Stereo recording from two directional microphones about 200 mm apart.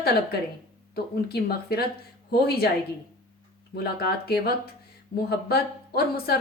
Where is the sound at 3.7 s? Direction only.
50° left (ahead or behind).